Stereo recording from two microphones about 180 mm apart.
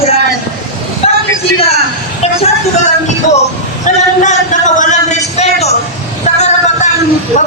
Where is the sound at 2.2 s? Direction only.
35° left (ahead or behind).